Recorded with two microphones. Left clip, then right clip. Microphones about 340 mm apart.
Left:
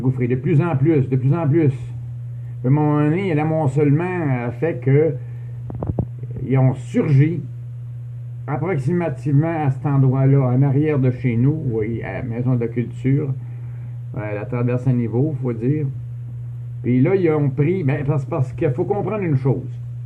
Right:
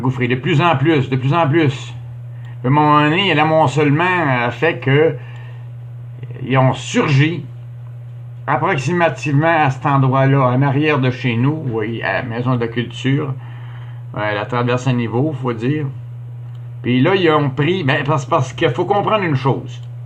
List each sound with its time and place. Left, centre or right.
0.0 s speech: right
6.6 s speech: right
8.4 s speech: right
17.1 s speech: right